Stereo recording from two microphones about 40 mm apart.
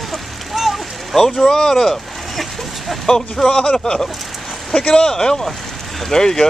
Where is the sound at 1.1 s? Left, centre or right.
Centre.